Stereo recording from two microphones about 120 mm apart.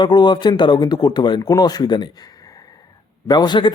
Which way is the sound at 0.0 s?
35° left (ahead or behind).